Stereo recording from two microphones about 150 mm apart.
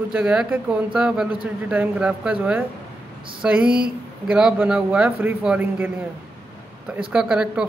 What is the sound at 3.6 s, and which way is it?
Speech, 80° right.